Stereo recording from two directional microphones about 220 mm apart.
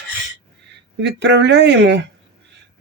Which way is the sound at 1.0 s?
50° right (ahead or behind).